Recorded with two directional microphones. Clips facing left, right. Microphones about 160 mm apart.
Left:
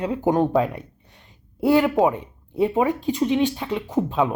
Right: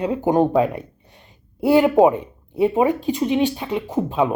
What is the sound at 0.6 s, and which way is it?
Speech, 5° right (ahead or behind).